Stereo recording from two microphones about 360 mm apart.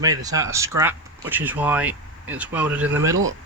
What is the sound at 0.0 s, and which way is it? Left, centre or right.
Speech, centre.